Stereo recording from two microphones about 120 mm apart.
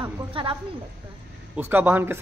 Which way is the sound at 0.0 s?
45° right (ahead or behind).